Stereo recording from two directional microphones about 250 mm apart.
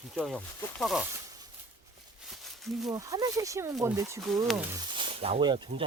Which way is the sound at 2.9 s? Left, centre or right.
Centre.